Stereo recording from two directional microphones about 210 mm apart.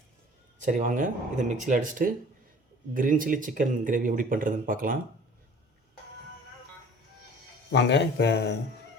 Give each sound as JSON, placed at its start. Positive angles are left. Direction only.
{"t": 0.6, "sound": "speech", "side_deg": -35}
{"t": 7.7, "sound": "speech", "side_deg": 55}